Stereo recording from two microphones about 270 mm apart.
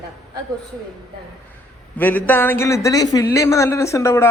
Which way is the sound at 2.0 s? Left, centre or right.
Centre.